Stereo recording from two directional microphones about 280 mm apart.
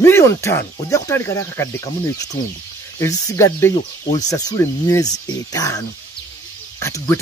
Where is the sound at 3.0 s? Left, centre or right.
Centre.